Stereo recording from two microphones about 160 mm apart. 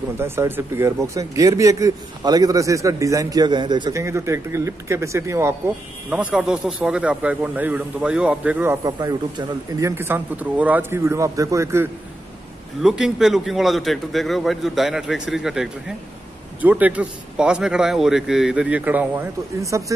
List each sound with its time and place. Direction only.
0.2 s speech: 15° right (ahead or behind)
6.0 s speech: 5° right (ahead or behind)
8.8 s speech: 20° right (ahead or behind)
12.8 s a man's voice: 5° right (ahead or behind)